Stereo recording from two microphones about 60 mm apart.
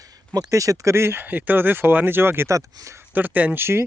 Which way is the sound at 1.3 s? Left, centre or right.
Right.